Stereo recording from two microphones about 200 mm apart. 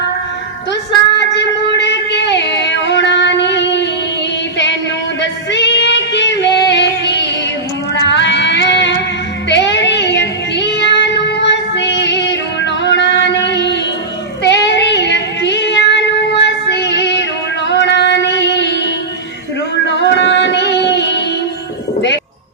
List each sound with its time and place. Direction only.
1.4 s music: 60° left (ahead or behind)
5.2 s music: 60° left (ahead or behind)
7.9 s cat: 60° left (ahead or behind)
9.5 s child singing: 60° left (ahead or behind)
17.7 s music: 60° left (ahead or behind)